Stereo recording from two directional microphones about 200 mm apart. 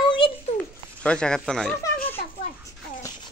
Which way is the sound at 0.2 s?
25° left (ahead or behind).